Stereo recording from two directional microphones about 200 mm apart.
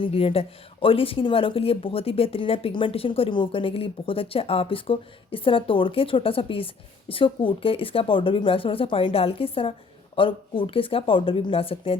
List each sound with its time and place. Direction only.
0.0 s speech: 30° left (ahead or behind)